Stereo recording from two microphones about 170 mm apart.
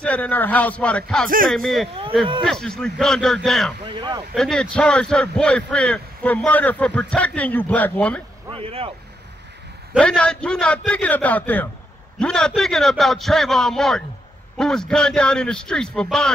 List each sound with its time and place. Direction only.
0.0 s a man's voice: 10° left (ahead or behind)
3.8 s speech: 30° right (ahead or behind)
4.4 s speech: 5° left (ahead or behind)
8.5 s speech: 35° right (ahead or behind)
9.9 s a man's voice: 5° left (ahead or behind)